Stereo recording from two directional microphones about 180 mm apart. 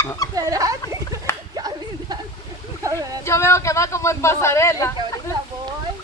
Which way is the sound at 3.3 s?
15° left (ahead or behind).